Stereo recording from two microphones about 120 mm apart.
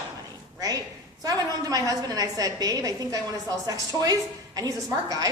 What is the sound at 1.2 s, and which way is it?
A woman's voice, 30° right (ahead or behind).